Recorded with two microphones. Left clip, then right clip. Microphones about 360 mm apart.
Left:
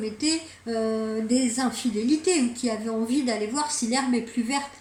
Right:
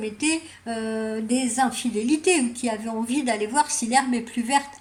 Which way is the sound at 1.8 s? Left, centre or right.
Right.